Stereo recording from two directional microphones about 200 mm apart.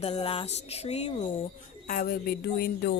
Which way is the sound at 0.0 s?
30° left (ahead or behind).